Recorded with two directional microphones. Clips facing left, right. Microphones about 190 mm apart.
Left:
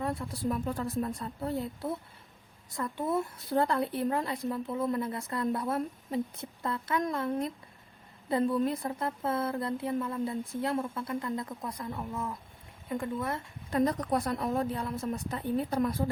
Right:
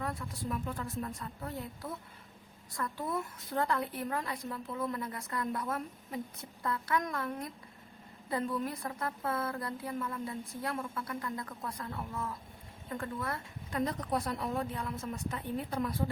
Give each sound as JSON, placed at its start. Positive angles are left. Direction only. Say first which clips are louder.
{"t": 0.0, "sound": "a woman's voice", "louder": "left 6 dB", "side_deg": 30}
{"t": 13.7, "sound": "a woman's voice", "louder": "left 6 dB", "side_deg": 40}